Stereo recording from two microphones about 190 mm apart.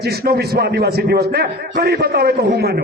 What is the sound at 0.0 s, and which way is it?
A man's voice, 55° right (ahead or behind).